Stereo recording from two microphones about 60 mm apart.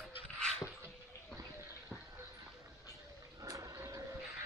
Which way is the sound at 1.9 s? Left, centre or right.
Centre.